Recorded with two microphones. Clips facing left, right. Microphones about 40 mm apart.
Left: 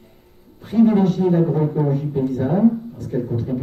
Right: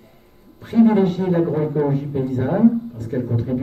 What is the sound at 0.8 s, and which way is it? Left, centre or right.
Speech, centre.